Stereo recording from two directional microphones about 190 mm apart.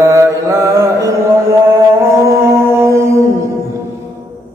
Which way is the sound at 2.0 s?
15° right (ahead or behind).